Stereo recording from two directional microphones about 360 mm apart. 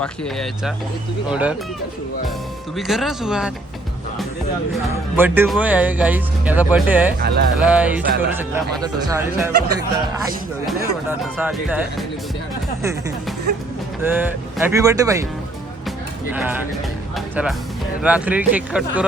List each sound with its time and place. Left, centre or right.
0.0 s speech: centre
2.7 s speech: centre
4.7 s speech: centre
7.2 s speech: right
7.6 s speech: centre
14.0 s speech: centre
17.2 s music: centre
18.0 s speech: centre